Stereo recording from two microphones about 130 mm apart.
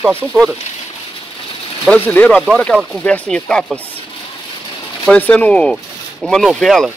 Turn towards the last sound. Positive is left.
turn(degrees=0)  # may be behind; listen again after turning